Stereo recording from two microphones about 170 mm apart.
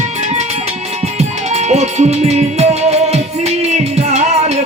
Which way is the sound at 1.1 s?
40° right (ahead or behind).